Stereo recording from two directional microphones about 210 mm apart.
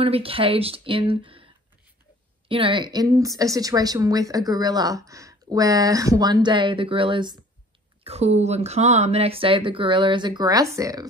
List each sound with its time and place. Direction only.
0.0 s a woman's voice: 25° right (ahead or behind)